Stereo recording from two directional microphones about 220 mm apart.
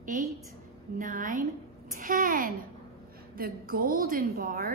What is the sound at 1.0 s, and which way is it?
A woman's voice, 35° right (ahead or behind).